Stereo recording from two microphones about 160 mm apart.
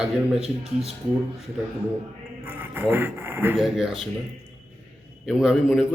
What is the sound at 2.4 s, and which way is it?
Speech, 15° right (ahead or behind).